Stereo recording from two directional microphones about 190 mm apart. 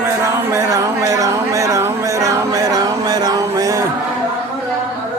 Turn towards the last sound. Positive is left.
turn(degrees=-15)  # may be behind; listen again after turning